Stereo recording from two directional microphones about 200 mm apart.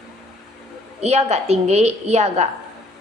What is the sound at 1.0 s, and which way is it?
A woman's voice, 35° right (ahead or behind).